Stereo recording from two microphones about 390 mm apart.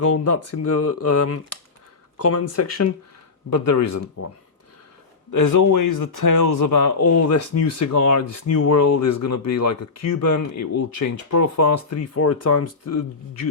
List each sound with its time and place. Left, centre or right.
0.0 s speech: left
5.3 s speech: left